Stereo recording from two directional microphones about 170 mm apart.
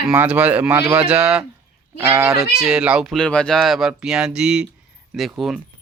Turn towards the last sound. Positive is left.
turn(degrees=0)  # may be behind; listen again after turning